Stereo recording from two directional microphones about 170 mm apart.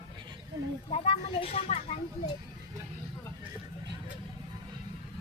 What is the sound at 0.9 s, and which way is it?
Speech, 35° left (ahead or behind).